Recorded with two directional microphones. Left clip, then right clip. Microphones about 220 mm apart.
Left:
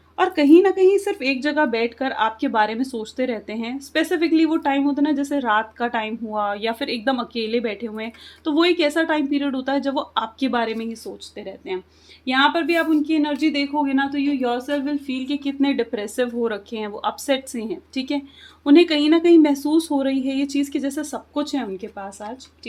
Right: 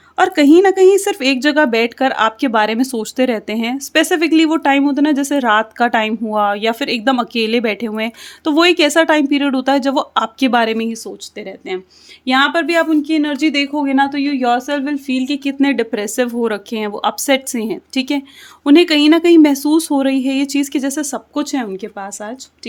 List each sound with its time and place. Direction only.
0.2 s speech: 50° right (ahead or behind)